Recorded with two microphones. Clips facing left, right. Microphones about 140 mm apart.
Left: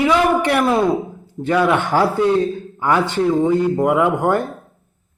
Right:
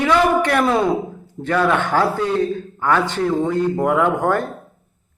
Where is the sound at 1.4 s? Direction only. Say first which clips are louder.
Left 2 dB; 15° left (ahead or behind).